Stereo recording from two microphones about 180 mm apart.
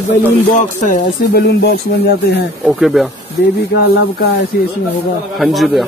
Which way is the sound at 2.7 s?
Centre (ahead or behind).